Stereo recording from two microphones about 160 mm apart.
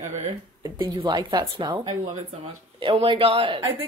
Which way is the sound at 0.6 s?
30° right (ahead or behind).